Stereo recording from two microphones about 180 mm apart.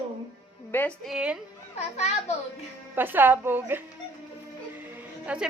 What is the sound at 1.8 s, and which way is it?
Speech, 40° left (ahead or behind).